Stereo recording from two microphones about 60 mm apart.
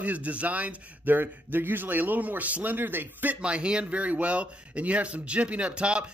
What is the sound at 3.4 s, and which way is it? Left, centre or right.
Speech, centre.